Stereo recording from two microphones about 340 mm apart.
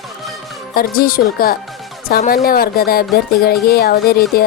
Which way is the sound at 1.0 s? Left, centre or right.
Left.